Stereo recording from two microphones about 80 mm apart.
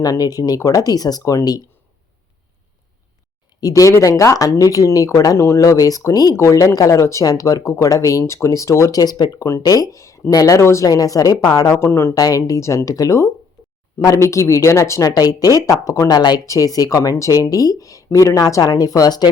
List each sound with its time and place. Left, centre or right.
0.0 s speech: left
3.6 s speech: left
11.8 s speech: left
12.1 s speech: left
12.5 s speech: left